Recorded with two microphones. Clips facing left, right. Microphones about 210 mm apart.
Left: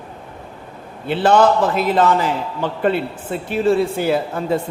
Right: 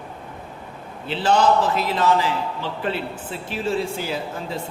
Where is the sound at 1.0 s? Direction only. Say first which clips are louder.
Left 5 dB; 55° left (ahead or behind).